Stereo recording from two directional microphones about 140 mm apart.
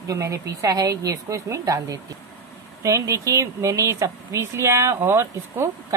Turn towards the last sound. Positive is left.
turn(degrees=-20)  # may be behind; listen again after turning